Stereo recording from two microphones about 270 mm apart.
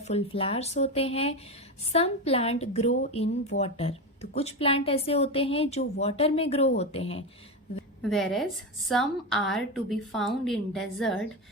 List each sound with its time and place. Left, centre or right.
0.0 s a woman's voice: left
8.0 s a woman's voice: centre